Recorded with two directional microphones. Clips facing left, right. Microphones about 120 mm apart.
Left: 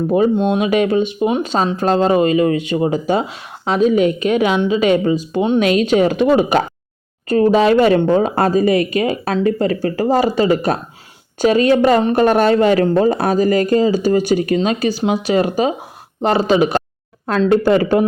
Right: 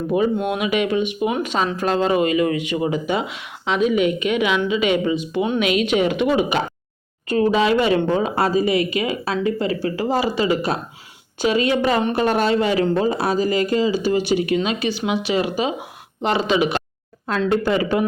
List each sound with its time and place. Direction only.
0.3 s speech: 25° left (ahead or behind)
0.7 s speech: 35° left (ahead or behind)